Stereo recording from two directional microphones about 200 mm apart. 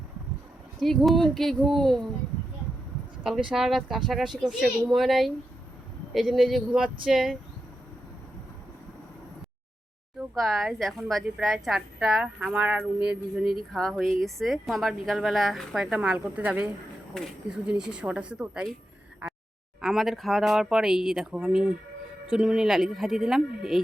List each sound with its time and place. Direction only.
0.8 s a woman's voice: centre (ahead or behind)
3.5 s a woman's voice: centre (ahead or behind)
10.2 s a woman's voice: centre (ahead or behind)
19.2 s a sound: 5° right (ahead or behind)
19.8 s a woman's voice: centre (ahead or behind)